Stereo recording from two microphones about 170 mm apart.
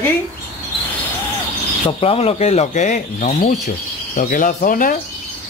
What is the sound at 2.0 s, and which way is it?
Speech, 35° left (ahead or behind).